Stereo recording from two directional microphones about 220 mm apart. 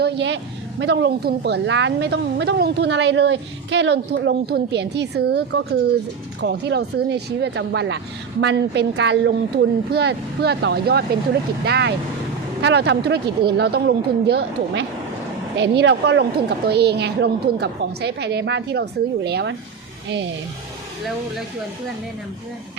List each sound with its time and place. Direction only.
0.0 s speech: 55° right (ahead or behind)